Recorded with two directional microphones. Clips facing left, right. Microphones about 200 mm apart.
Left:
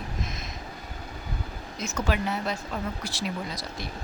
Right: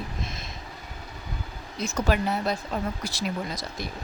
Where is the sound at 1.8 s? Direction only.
35° right (ahead or behind).